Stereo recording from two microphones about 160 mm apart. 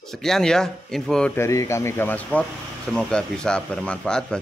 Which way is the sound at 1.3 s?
15° left (ahead or behind).